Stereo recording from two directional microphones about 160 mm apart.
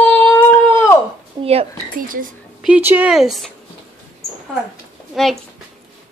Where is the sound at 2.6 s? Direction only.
10° right (ahead or behind).